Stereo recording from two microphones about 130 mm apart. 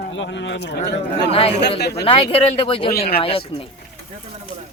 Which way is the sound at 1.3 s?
50° left (ahead or behind).